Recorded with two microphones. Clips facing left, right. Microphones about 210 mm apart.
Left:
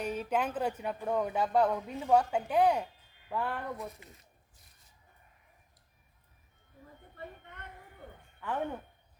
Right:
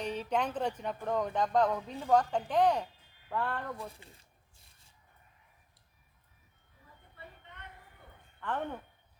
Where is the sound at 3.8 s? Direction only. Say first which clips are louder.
Left 2 dB; 30° right (ahead or behind).